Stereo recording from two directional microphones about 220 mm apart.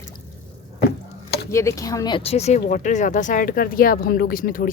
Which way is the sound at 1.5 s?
15° left (ahead or behind).